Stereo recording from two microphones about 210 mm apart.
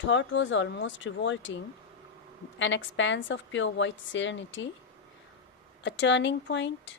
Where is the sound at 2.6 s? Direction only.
60° left (ahead or behind).